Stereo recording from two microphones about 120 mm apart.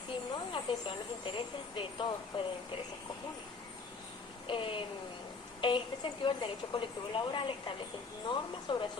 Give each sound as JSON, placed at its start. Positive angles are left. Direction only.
{"t": 0.3, "sound": "a woman's voice", "side_deg": 45}
{"t": 4.4, "sound": "a woman's voice", "side_deg": 45}